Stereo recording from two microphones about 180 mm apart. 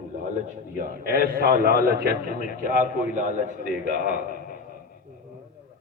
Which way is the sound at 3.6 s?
50° left (ahead or behind).